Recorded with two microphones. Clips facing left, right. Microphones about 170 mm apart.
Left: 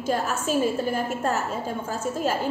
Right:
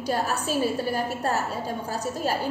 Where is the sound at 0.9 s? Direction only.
35° right (ahead or behind).